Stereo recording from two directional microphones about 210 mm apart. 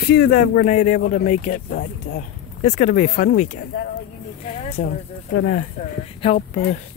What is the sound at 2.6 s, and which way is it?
Speech, 35° left (ahead or behind).